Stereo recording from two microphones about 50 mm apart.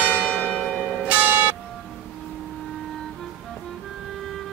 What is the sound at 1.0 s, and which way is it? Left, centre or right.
Church bell, right.